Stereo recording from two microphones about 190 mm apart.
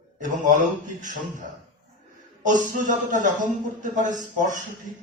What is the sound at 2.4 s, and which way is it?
Speech, 40° right (ahead or behind).